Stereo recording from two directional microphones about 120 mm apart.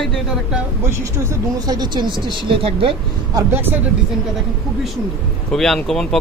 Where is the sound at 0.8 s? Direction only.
20° right (ahead or behind).